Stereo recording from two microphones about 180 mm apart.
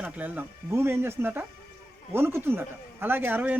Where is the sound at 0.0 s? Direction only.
10° right (ahead or behind).